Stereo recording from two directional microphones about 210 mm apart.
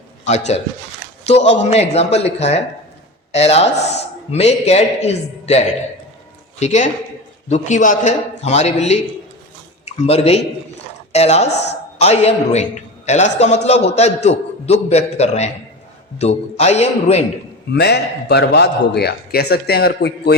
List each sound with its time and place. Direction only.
0.3 s a man's voice: 30° left (ahead or behind)
17.7 s a man's voice: 50° left (ahead or behind)